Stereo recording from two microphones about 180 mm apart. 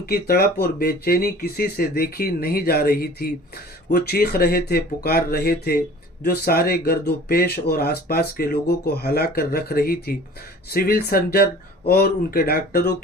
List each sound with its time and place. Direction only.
0.0 s speech: 60° left (ahead or behind)